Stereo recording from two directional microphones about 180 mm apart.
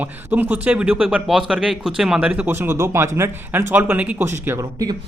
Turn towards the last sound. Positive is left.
turn(degrees=-20)  # may be behind; listen again after turning